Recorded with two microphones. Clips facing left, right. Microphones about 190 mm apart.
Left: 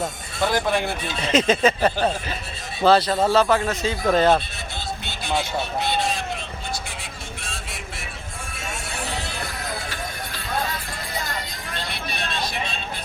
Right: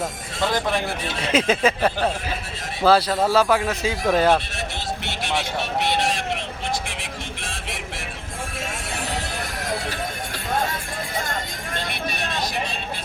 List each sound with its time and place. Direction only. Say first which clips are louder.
1.2 s speech: left 1 dB; 10° right (ahead or behind)
5.0 s vehicle: left 2 dB; 90° right
9.0 s music: right 2 dB; 90° right
11.3 s vehicle: right 2 dB; 50° right (ahead or behind)